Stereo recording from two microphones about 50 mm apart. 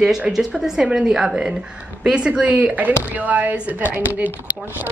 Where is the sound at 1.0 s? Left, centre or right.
Centre.